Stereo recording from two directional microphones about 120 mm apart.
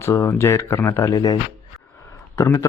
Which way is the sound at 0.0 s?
20° left (ahead or behind).